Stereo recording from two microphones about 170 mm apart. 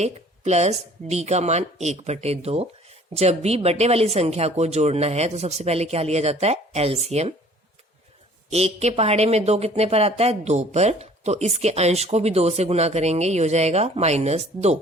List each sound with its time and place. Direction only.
0.0 s speech: 40° right (ahead or behind)
8.4 s speech: 40° right (ahead or behind)